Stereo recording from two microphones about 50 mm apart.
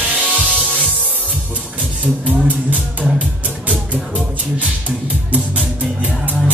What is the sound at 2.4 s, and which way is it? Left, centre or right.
Speech, right.